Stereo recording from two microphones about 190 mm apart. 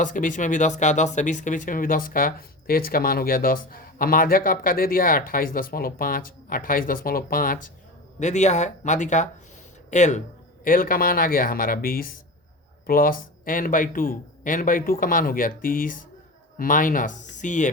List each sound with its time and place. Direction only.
0.0 s speech: 45° left (ahead or behind)
8.2 s speech: 40° left (ahead or behind)